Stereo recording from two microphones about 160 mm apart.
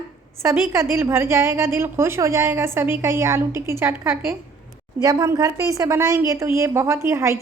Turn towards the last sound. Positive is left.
turn(degrees=-15)  # may be behind; listen again after turning